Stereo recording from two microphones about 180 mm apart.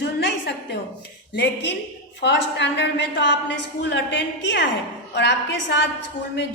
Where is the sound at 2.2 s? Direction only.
75° left (ahead or behind).